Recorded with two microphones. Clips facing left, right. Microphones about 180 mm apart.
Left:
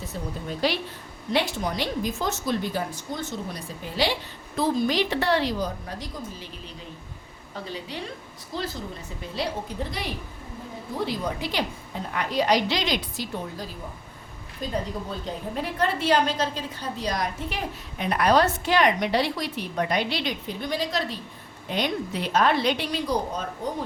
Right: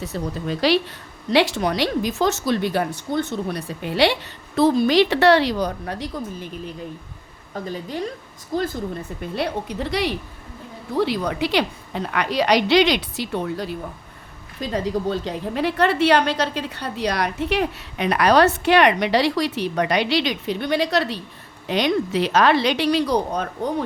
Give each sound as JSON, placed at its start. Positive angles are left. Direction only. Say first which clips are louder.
{"t": 0.0, "sound": "a woman's voice", "louder": "right 6 dB", "side_deg": -80}
{"t": 7.5, "sound": "a woman's voice", "louder": "right 6 dB", "side_deg": -45}
{"t": 9.3, "sound": "a woman's voice", "louder": "right 4 dB", "side_deg": -65}
{"t": 14.6, "sound": "a woman's voice", "louder": "right 7 dB", "side_deg": -90}
{"t": 21.7, "sound": "a woman's voice", "louder": "right 7 dB", "side_deg": -90}